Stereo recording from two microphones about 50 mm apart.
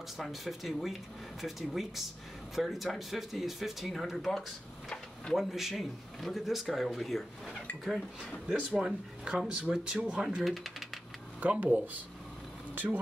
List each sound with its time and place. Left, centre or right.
0.2 s speech: centre
4.8 s a sound: centre
5.3 s speech: centre
8.7 s speech: centre
10.4 s speech: centre
11.3 s speech: right